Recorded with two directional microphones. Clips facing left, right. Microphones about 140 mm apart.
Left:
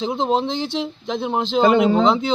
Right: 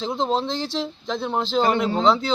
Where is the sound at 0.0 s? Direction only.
15° left (ahead or behind).